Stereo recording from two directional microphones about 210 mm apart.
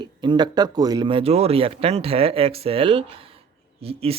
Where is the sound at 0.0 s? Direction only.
20° right (ahead or behind).